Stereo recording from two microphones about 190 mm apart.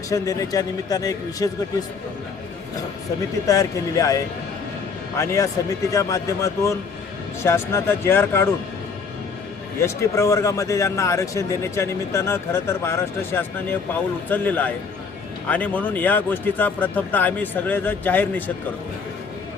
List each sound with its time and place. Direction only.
0.1 s speech: 15° left (ahead or behind)
3.4 s speech: 20° left (ahead or behind)
9.8 s speech: 15° left (ahead or behind)